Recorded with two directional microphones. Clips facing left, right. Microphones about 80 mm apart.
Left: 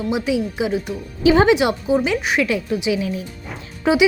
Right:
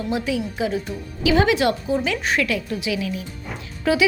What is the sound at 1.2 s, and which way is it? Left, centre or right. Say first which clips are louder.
Speech: left 5 dB; left.